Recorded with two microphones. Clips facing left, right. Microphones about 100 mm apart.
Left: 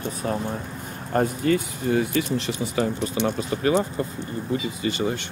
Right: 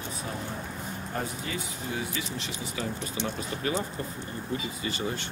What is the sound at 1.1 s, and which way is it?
Speech, 55° left (ahead or behind).